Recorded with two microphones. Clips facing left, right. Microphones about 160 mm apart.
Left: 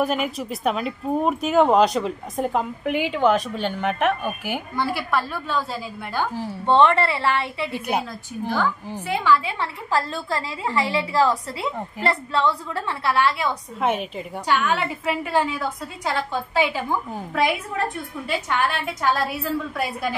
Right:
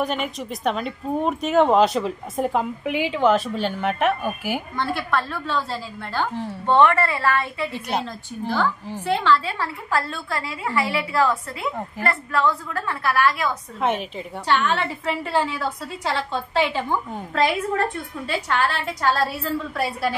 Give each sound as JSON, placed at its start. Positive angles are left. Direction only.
{"t": 0.0, "sound": "speech", "side_deg": 5}
{"t": 6.6, "sound": "a woman's voice", "side_deg": 20}
{"t": 7.7, "sound": "speech", "side_deg": 10}
{"t": 9.1, "sound": "a woman's voice", "side_deg": 10}
{"t": 9.9, "sound": "a woman's voice", "side_deg": 30}
{"t": 13.7, "sound": "speech", "side_deg": 0}
{"t": 14.7, "sound": "a woman's voice", "side_deg": 10}